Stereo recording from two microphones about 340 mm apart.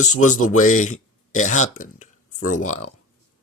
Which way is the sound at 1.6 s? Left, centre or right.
Left.